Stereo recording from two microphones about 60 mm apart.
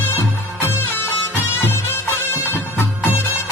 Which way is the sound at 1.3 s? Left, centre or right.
Left.